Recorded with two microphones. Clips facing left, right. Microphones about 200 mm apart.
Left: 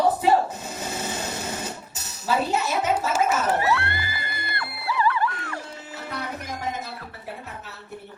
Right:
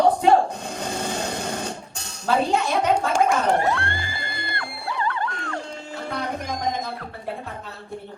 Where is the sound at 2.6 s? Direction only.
5° left (ahead or behind).